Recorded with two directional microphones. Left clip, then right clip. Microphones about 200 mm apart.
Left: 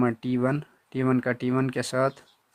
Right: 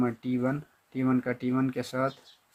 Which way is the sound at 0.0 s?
50° left (ahead or behind).